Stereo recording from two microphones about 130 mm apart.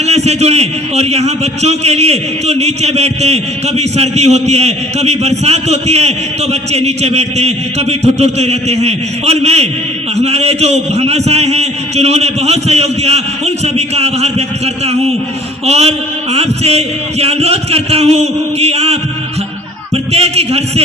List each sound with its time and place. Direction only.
0.0 s a man's voice: 55° right (ahead or behind)
15.6 s a man's voice: 55° right (ahead or behind)